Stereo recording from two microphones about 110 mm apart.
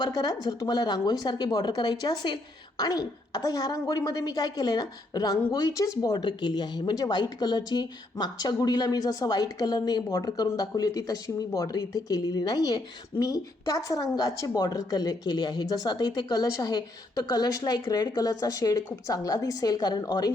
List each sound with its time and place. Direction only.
0.0 s speech: 35° left (ahead or behind)